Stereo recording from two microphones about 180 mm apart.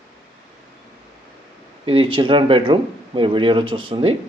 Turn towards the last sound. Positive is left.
turn(degrees=-30)  # may be behind; listen again after turning